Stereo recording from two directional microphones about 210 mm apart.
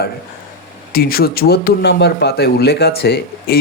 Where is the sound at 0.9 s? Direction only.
45° left (ahead or behind).